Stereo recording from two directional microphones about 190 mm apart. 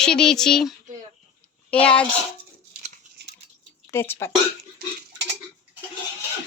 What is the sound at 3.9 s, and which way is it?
Speech, 10° left (ahead or behind).